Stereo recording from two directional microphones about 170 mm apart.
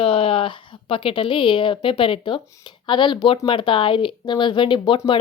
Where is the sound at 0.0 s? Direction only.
35° left (ahead or behind).